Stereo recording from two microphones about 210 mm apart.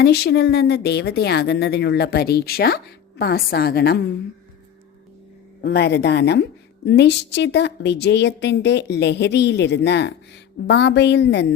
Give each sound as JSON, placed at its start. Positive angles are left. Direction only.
{"t": 0.0, "sound": "speech", "side_deg": 50}
{"t": 5.6, "sound": "a woman's voice", "side_deg": 50}